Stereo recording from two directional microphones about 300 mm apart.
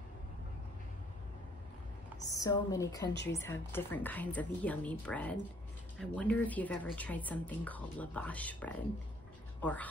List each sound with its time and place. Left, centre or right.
2.2 s a woman's voice: centre
3.1 s speech: left
3.3 s a woman's voice: centre